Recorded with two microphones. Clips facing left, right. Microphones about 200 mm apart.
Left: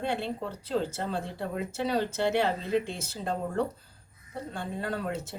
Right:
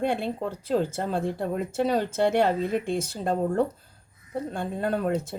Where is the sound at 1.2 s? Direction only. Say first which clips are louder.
Right 6 dB; 50° right (ahead or behind).